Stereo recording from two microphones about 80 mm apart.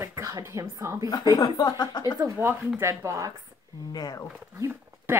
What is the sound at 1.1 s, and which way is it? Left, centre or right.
Speech, left.